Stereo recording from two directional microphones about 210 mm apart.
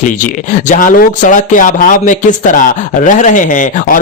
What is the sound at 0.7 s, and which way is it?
Speech, 40° left (ahead or behind).